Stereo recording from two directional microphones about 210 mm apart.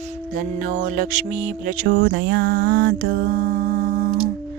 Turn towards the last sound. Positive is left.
turn(degrees=-45)  # may be behind; listen again after turning